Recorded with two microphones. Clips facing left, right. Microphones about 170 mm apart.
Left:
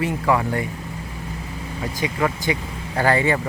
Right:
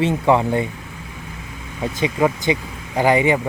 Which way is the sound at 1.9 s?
20° right (ahead or behind).